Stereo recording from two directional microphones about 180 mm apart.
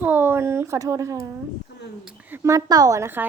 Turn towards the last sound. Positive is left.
turn(degrees=-15)  # may be behind; listen again after turning